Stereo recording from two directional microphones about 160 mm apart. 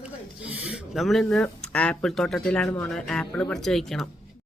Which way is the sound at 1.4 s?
10° left (ahead or behind).